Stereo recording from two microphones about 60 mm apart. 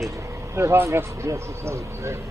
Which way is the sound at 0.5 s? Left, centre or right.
Right.